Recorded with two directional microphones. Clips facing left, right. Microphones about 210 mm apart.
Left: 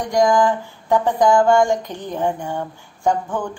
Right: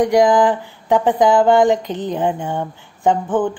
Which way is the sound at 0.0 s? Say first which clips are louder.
Right 3 dB; 15° right (ahead or behind).